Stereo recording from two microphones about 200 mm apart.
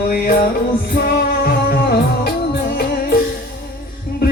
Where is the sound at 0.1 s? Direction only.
45° left (ahead or behind).